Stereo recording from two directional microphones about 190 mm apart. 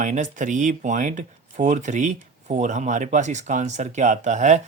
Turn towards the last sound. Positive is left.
turn(degrees=-40)  # may be behind; listen again after turning